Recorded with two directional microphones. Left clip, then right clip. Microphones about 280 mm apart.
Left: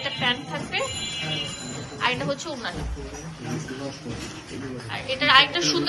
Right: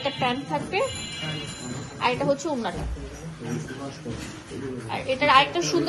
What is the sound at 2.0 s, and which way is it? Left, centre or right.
Speech, centre.